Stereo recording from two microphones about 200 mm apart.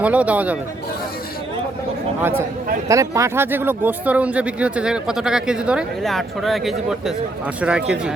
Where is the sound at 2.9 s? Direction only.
15° right (ahead or behind).